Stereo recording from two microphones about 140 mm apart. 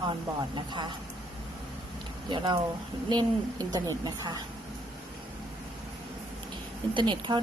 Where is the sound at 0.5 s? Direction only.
35° right (ahead or behind).